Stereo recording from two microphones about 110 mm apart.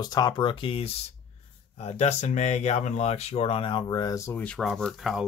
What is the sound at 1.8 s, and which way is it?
Speech, 90° left.